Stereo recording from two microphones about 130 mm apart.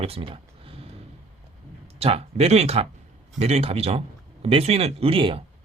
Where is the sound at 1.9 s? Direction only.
50° right (ahead or behind).